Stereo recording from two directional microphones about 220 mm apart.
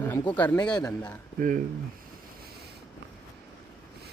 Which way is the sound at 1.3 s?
40° right (ahead or behind).